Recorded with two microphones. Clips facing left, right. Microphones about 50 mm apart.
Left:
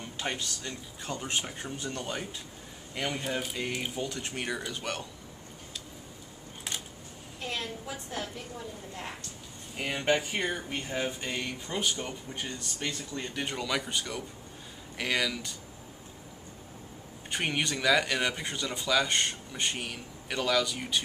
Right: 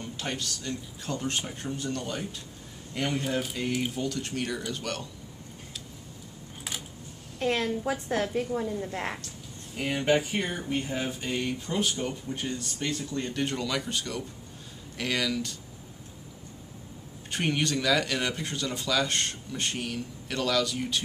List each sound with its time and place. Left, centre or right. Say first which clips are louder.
0.0 s speech: right 1 dB; centre
3.9 s speech: right 3 dB; centre
7.3 s a woman's voice: right 9 dB; right
9.8 s speech: right 3 dB; centre
17.3 s speech: right 3 dB; centre